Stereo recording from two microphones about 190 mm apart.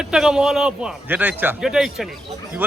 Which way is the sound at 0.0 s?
5° right (ahead or behind).